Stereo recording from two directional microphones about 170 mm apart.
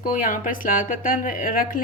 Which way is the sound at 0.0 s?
55° left (ahead or behind).